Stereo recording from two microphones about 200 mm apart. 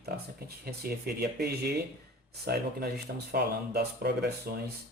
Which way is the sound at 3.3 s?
55° right (ahead or behind).